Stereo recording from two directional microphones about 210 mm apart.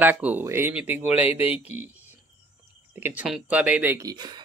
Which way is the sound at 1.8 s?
10° right (ahead or behind).